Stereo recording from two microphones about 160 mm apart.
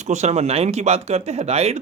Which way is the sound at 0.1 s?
45° right (ahead or behind).